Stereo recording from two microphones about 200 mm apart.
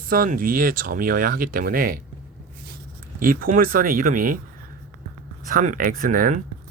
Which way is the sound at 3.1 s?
45° right (ahead or behind).